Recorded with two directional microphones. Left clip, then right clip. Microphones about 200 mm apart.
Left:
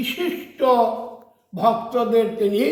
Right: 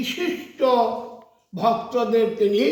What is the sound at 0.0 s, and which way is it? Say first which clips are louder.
A man's voice: left 1 dB; 5° right (ahead or behind).